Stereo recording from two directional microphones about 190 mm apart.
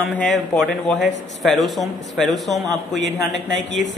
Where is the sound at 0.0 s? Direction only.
5° left (ahead or behind).